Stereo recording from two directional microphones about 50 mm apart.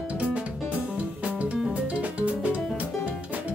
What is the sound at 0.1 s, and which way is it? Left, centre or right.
Music, right.